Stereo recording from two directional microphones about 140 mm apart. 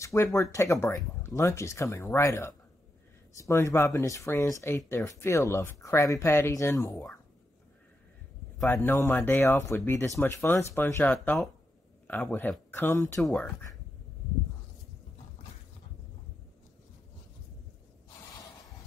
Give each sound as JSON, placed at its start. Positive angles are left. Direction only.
{"t": 0.0, "sound": "speech", "side_deg": 20}
{"t": 8.6, "sound": "speech", "side_deg": 15}